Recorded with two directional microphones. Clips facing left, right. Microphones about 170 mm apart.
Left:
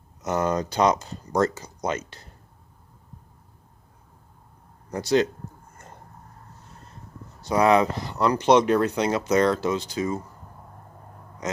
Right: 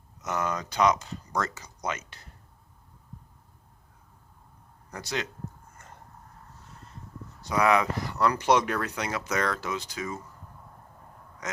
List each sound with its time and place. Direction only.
0.3 s speech: 35° left (ahead or behind)
4.9 s speech: 30° left (ahead or behind)
7.4 s speech: 30° left (ahead or behind)